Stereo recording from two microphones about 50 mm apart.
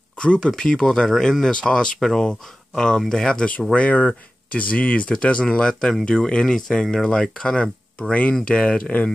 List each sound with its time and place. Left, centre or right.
0.2 s speech: left
2.0 s speech: centre
3.7 s speech: left
8.1 s speech: left